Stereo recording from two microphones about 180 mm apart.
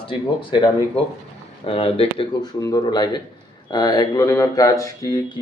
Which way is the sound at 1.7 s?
30° left (ahead or behind).